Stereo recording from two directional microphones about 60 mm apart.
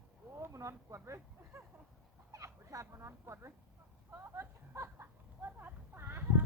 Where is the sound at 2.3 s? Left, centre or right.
Right.